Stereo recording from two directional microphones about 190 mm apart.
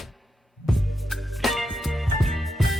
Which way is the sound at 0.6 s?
Centre (ahead or behind).